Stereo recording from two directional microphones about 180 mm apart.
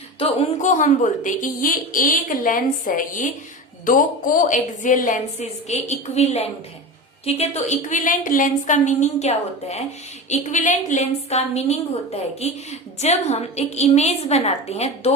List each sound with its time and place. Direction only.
0.2 s a woman's voice: 40° left (ahead or behind)